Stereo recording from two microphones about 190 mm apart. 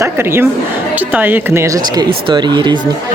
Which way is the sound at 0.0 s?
15° right (ahead or behind).